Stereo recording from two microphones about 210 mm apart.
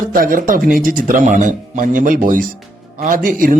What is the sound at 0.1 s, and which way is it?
Speech, 40° right (ahead or behind).